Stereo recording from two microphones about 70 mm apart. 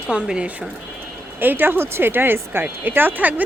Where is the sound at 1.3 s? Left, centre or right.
Right.